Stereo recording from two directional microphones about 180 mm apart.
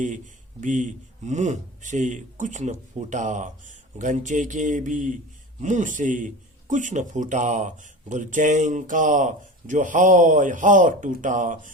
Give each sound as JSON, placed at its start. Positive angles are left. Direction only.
{"t": 0.6, "sound": "a man's voice", "side_deg": -45}